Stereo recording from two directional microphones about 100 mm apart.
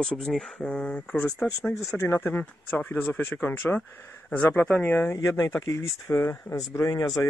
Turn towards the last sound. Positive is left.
turn(degrees=35)  # may be behind; listen again after turning